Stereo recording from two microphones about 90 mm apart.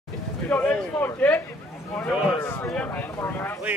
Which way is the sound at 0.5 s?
20° left (ahead or behind).